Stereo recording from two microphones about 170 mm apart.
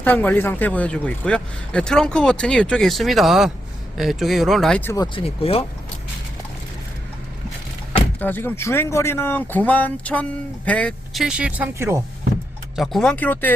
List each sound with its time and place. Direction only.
0.0 s speech: 10° left (ahead or behind)
5.1 s speech: 35° left (ahead or behind)
8.2 s speech: 10° left (ahead or behind); by 11.9 s 15° right (ahead or behind)
12.7 s speech: centre (ahead or behind)